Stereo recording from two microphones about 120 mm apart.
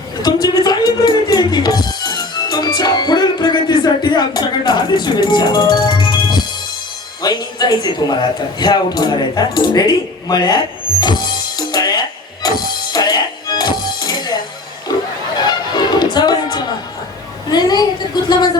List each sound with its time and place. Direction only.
0.2 s music: 35° left (ahead or behind)
7.2 s a sound: 35° left (ahead or behind)
15.4 s music: 35° left (ahead or behind)
17.5 s speech: 35° left (ahead or behind)